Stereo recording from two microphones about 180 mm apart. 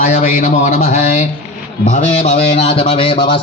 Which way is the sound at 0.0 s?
40° left (ahead or behind).